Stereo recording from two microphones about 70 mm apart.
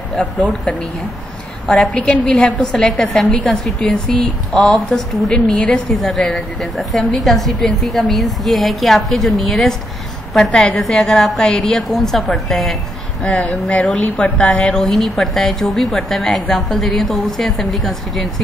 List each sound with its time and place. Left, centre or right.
0.1 s a woman's voice: centre
1.7 s a woman's voice: centre
2.2 s a woman's voice: centre
5.9 s a woman's voice: centre
13.3 s a woman's voice: centre
13.8 s a woman's voice: centre